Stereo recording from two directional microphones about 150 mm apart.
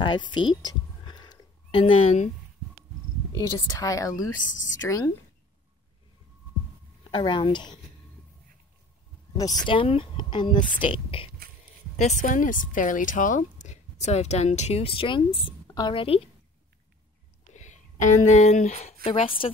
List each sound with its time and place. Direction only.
0.0 s a sound: 30° left (ahead or behind)
3.3 s speech: 25° left (ahead or behind)
4.4 s speech: 60° left (ahead or behind)
4.7 s speech: 20° left (ahead or behind)
7.1 s speech: 35° left (ahead or behind)
9.4 s speech: 25° left (ahead or behind)
12.0 s speech: 55° left (ahead or behind); by 16.3 s 35° left (ahead or behind)
17.6 s speech: 55° left (ahead or behind)
19.0 s speech: 35° left (ahead or behind)